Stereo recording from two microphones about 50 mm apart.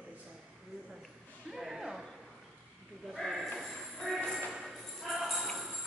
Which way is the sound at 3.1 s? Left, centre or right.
Centre.